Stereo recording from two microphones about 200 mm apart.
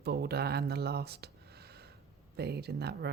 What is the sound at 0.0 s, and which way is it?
Speech, 50° right (ahead or behind).